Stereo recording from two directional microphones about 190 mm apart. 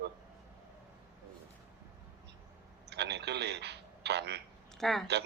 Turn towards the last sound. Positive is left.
turn(degrees=0)  # may be behind; listen again after turning